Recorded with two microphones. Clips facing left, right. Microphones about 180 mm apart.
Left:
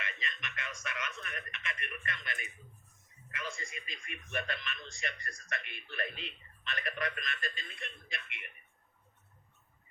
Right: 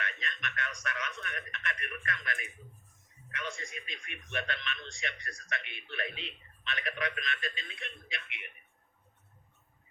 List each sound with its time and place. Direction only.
0.0 s speech: centre (ahead or behind)